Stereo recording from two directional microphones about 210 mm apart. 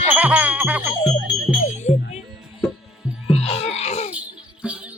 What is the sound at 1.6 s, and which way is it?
Music, 35° left (ahead or behind).